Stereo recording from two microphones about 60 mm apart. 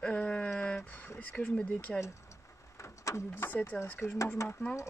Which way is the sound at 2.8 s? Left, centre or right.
Left.